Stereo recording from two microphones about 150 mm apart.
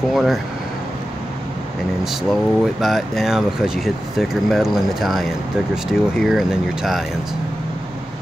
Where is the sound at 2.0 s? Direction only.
Centre (ahead or behind).